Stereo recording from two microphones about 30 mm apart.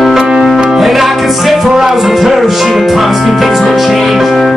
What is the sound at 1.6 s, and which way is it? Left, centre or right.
Music, centre.